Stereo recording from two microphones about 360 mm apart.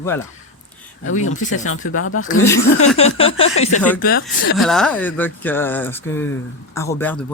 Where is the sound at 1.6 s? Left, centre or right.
Left.